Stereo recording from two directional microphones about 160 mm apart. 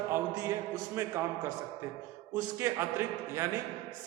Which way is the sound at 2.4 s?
15° right (ahead or behind).